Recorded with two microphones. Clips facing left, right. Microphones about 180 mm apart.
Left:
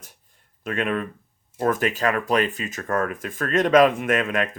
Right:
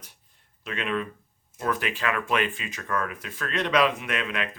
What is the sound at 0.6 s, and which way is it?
Speech, 50° left (ahead or behind).